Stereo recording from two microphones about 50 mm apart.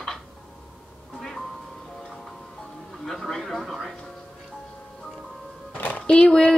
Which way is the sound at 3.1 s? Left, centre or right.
Centre.